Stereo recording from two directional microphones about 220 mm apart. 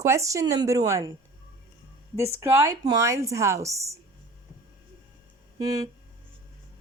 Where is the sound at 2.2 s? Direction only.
15° right (ahead or behind).